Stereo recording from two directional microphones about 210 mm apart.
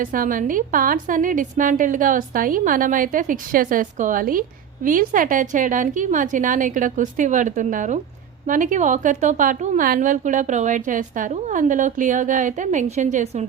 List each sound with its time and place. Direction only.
0.0 s a woman's voice: 40° right (ahead or behind)